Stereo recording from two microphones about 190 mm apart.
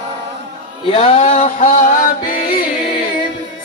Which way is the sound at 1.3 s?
40° left (ahead or behind).